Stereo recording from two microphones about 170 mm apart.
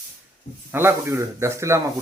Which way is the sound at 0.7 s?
15° right (ahead or behind).